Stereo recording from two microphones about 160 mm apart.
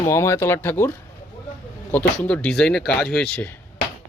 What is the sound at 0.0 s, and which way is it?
Speech, 20° left (ahead or behind).